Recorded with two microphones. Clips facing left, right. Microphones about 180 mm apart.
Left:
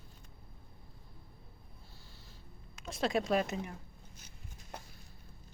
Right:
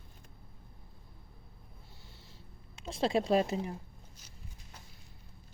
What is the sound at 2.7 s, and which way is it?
Speech, 30° right (ahead or behind).